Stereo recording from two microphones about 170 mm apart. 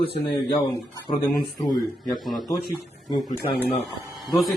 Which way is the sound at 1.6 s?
20° left (ahead or behind).